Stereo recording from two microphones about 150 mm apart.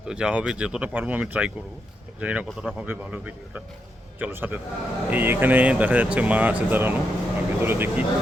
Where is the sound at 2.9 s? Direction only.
10° right (ahead or behind).